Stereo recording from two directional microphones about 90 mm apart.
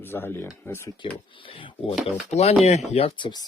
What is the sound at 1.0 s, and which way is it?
Speech, 65° left (ahead or behind).